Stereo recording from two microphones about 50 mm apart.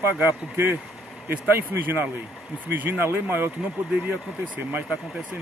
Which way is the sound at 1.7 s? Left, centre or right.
Right.